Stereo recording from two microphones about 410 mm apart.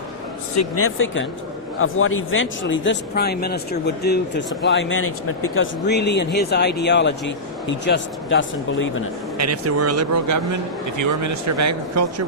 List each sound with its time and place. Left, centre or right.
0.5 s speech: left
9.4 s speech: right